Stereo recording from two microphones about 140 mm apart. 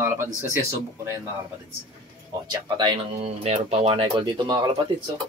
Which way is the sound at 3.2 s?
50° right (ahead or behind).